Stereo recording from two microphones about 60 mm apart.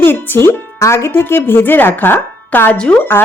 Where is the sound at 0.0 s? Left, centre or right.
Left.